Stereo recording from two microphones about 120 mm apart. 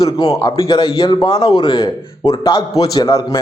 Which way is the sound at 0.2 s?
30° left (ahead or behind).